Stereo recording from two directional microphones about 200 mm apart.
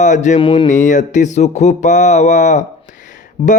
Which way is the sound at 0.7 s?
35° left (ahead or behind).